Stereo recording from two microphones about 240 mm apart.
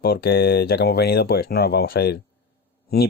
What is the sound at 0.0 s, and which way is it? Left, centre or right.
Speech, left.